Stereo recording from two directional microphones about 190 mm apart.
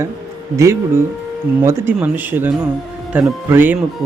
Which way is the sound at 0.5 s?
15° right (ahead or behind).